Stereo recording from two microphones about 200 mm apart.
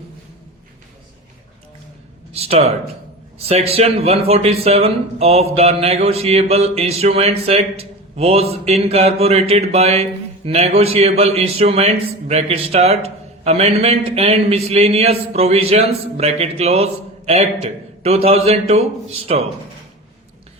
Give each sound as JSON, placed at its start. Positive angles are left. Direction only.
{"t": 2.3, "sound": "speech", "side_deg": -30}